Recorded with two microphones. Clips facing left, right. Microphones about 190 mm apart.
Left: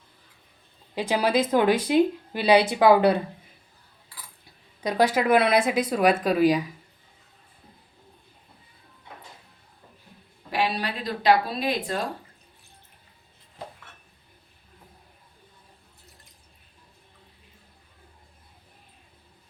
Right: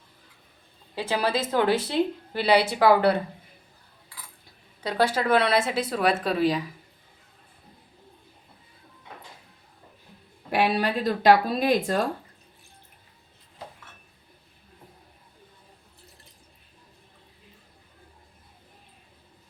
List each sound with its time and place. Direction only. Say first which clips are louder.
0.9 s speech: left 3 dB; 15° left (ahead or behind)
4.8 s speech: left 2 dB; 15° left (ahead or behind)
10.5 s speech: right 4 dB; 50° right (ahead or behind)